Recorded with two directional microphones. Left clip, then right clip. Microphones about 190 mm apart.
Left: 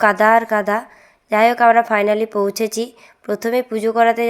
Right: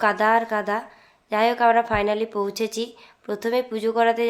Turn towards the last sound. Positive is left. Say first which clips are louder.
# left 5 dB
turn(degrees=25)  # may be behind; listen again after turning